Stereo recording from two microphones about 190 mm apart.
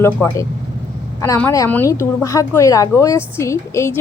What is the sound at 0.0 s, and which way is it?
A woman's voice, 10° left (ahead or behind).